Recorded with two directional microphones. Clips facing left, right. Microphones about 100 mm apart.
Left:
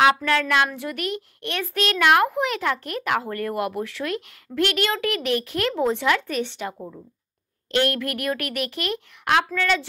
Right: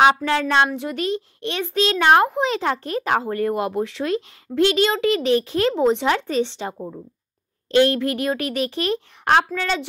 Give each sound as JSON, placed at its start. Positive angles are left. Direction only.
{"t": 0.0, "sound": "a child's voice", "side_deg": -25}
{"t": 7.7, "sound": "a child's voice", "side_deg": -25}